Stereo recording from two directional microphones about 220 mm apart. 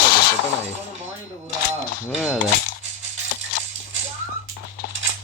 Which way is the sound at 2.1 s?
5° right (ahead or behind).